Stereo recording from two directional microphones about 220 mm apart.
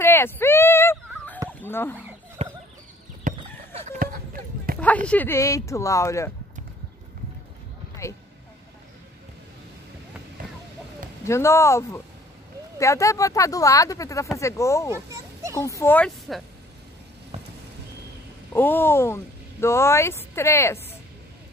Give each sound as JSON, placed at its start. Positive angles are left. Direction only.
{"t": 0.0, "sound": "a sound", "side_deg": 10}
{"t": 1.7, "sound": "speech", "side_deg": 10}
{"t": 2.4, "sound": "fowl", "side_deg": -30}
{"t": 3.3, "sound": "chicken", "side_deg": -35}
{"t": 4.0, "sound": "a sound", "side_deg": -40}
{"t": 4.7, "sound": "speech", "side_deg": 5}
{"t": 11.2, "sound": "speech", "side_deg": 10}
{"t": 14.9, "sound": "children playing", "side_deg": -10}
{"t": 15.6, "sound": "speech", "side_deg": 10}
{"t": 17.3, "sound": "vehicle", "side_deg": -30}
{"t": 18.5, "sound": "speech", "side_deg": 10}